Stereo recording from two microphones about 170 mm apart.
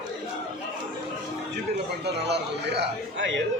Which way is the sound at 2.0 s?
80° right.